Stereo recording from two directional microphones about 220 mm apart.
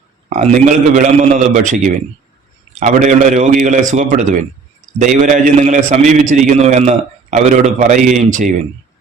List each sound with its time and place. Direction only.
0.3 s a man's voice: 30° right (ahead or behind)